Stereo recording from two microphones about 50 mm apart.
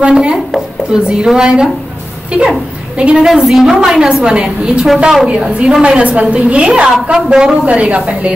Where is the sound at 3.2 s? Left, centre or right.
Centre.